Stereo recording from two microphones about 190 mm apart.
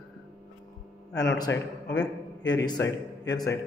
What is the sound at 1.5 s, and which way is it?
Speech, 75° left (ahead or behind).